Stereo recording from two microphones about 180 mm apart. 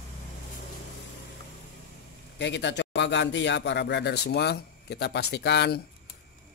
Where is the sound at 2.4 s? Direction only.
75° left (ahead or behind).